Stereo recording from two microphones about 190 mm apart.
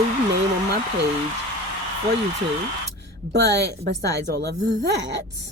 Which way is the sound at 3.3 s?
60° right (ahead or behind).